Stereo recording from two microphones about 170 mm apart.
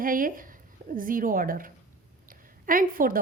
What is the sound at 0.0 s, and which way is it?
A woman's voice, 55° right (ahead or behind).